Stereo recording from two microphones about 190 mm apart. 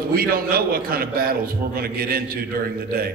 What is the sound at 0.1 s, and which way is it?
A man's voice, 50° right (ahead or behind).